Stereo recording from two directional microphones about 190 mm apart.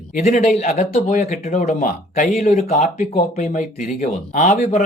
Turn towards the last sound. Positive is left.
turn(degrees=35)  # may be behind; listen again after turning